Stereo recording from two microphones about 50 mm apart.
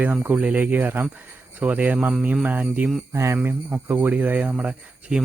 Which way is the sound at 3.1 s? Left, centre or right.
Right.